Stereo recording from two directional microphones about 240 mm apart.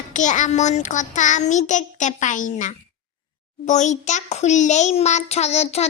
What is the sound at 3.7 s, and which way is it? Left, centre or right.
A child's voice, left.